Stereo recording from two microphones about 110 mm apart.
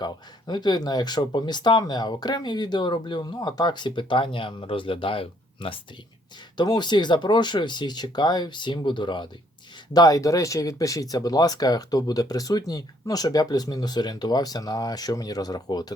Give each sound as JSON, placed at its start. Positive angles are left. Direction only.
{"t": 0.0, "sound": "speech", "side_deg": 40}
{"t": 6.6, "sound": "speech", "side_deg": 40}
{"t": 9.9, "sound": "speech", "side_deg": 35}